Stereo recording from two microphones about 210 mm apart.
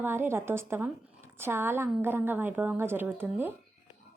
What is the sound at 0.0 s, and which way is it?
A woman's voice, 10° right (ahead or behind).